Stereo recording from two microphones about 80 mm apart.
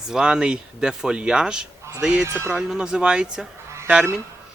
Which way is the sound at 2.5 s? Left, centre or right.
Centre.